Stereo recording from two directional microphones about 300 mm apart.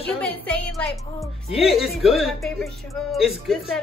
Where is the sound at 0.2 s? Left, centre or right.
Centre.